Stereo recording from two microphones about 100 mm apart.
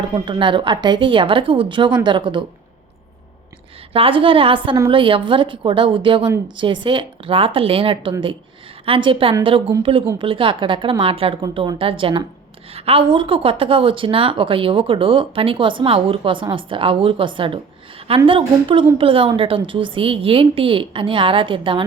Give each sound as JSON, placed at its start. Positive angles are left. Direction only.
{"t": 0.1, "sound": "a woman's voice", "side_deg": -55}
{"t": 3.9, "sound": "a woman's voice", "side_deg": -65}
{"t": 12.7, "sound": "a woman's voice", "side_deg": -75}